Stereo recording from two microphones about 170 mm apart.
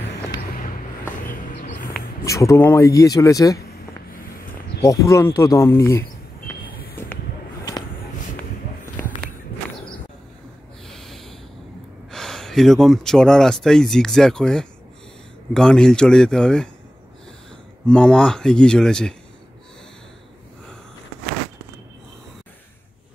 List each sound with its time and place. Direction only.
1.3 s a sound: 50° left (ahead or behind)
2.2 s speech: 20° left (ahead or behind)
4.8 s speech: 20° left (ahead or behind)
7.0 s a sound: 15° left (ahead or behind)
10.9 s snort: centre (ahead or behind)
12.1 s speech: 5° left (ahead or behind)
17.8 s speech: 5° left (ahead or behind)